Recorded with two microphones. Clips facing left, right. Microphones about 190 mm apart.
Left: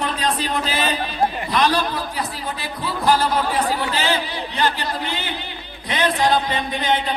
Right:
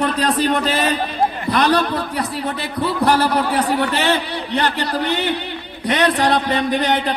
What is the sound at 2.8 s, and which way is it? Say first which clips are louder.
Speech: right 3 dB; 65° right (ahead or behind).